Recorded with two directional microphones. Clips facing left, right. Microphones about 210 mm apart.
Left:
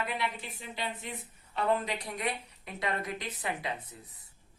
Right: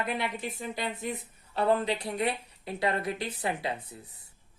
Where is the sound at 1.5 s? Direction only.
30° right (ahead or behind).